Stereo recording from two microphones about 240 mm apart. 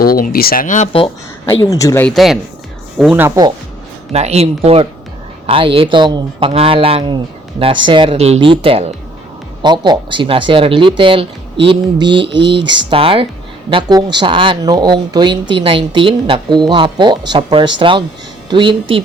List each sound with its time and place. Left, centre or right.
0.0 s speech: left
1.6 s speech: centre
4.1 s speech: right